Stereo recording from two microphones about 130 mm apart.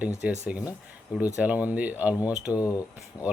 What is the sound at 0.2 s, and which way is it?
Speech, 10° right (ahead or behind).